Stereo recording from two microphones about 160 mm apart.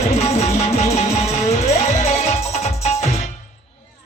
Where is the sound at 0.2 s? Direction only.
40° left (ahead or behind).